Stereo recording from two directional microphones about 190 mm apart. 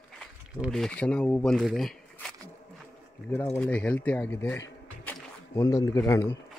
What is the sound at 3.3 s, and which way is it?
Speech, 10° left (ahead or behind).